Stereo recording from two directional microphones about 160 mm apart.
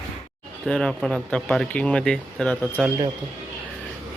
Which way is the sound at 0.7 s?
5° left (ahead or behind).